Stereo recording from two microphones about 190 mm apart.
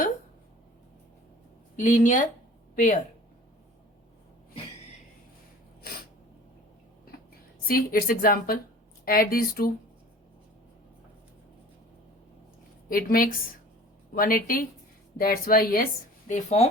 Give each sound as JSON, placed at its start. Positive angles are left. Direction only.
{"t": 1.7, "sound": "speech", "side_deg": 40}
{"t": 7.7, "sound": "speech", "side_deg": 50}
{"t": 12.9, "sound": "speech", "side_deg": 50}
{"t": 16.3, "sound": "speech", "side_deg": 35}